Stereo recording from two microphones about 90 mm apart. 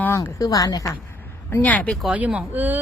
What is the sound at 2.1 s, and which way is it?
Speech, 15° right (ahead or behind).